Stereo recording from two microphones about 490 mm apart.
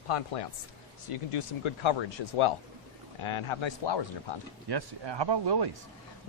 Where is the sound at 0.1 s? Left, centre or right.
Left.